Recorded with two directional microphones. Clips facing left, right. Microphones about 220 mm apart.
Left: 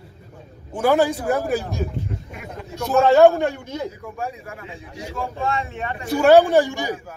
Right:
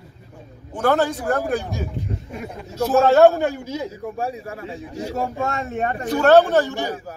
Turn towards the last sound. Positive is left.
turn(degrees=15)  # may be behind; listen again after turning